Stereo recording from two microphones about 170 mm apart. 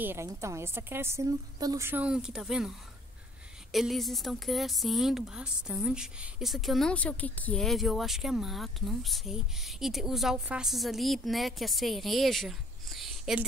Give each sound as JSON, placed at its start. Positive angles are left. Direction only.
{"t": 0.0, "sound": "a woman's voice", "side_deg": -15}
{"t": 3.7, "sound": "a woman's voice", "side_deg": 0}